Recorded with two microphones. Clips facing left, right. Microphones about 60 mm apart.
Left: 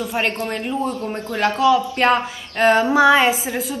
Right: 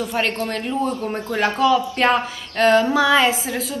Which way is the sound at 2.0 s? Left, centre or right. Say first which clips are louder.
Left 1 dB; left.